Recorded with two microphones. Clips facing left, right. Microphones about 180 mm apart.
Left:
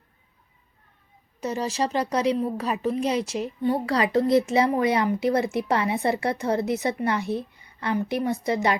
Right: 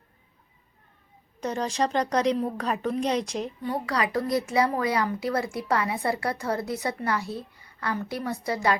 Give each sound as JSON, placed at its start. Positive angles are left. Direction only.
{"t": 1.4, "sound": "a woman's voice", "side_deg": 5}
{"t": 3.6, "sound": "speech", "side_deg": 25}